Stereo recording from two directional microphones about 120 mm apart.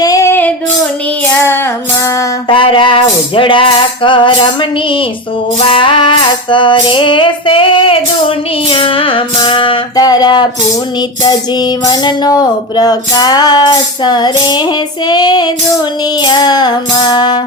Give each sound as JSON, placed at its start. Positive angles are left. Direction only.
{"t": 0.0, "sound": "female singing", "side_deg": 25}
{"t": 1.2, "sound": "child singing", "side_deg": 20}
{"t": 2.5, "sound": "music", "side_deg": 45}
{"t": 9.9, "sound": "music", "side_deg": 35}